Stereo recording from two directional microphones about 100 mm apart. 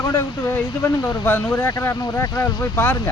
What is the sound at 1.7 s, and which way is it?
Speech, 30° left (ahead or behind).